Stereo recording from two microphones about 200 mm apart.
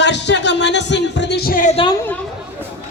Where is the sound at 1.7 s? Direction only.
25° left (ahead or behind).